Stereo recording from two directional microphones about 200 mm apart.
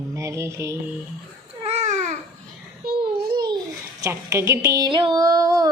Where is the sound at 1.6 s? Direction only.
35° right (ahead or behind).